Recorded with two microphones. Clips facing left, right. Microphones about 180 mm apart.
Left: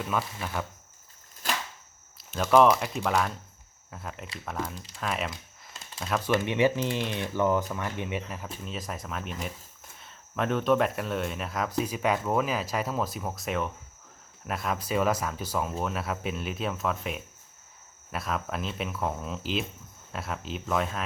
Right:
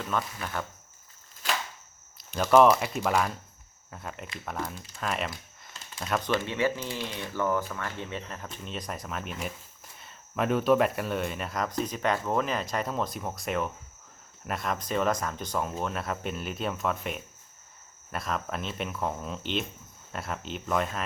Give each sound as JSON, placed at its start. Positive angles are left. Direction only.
{"t": 0.0, "sound": "speech", "side_deg": 5}
{"t": 2.3, "sound": "speech", "side_deg": 0}
{"t": 6.4, "sound": "speech", "side_deg": 15}